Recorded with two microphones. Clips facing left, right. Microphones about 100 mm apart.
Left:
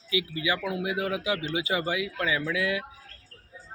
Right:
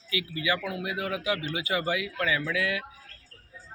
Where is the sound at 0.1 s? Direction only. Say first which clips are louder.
Left 1 dB; 20° left (ahead or behind).